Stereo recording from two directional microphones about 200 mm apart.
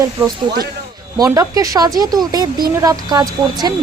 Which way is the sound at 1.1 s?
15° right (ahead or behind).